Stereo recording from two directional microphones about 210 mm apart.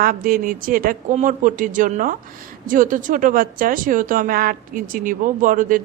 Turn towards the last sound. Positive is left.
turn(degrees=-40)  # may be behind; listen again after turning